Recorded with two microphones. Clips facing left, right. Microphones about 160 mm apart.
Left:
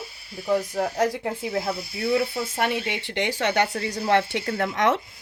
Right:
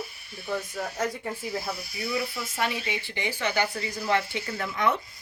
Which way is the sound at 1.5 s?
60° left (ahead or behind).